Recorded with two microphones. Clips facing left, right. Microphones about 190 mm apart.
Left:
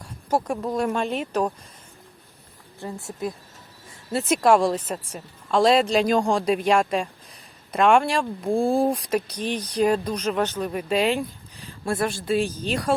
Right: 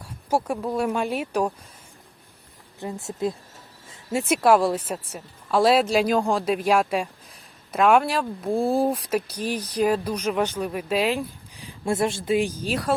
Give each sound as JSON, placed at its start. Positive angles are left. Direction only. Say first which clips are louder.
{"t": 0.0, "sound": "speech", "louder": "even", "side_deg": -10}
{"t": 2.8, "sound": "speech", "louder": "right 3 dB", "side_deg": -25}
{"t": 4.1, "sound": "a woman's voice", "louder": "even", "side_deg": -10}
{"t": 11.6, "sound": "a woman's voice", "louder": "right 2 dB", "side_deg": -20}